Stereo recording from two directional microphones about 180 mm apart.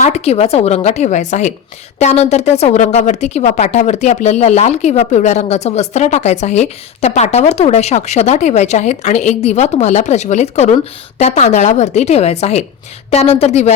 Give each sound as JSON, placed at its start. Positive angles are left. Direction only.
{"t": 0.0, "sound": "a woman's voice", "side_deg": 35}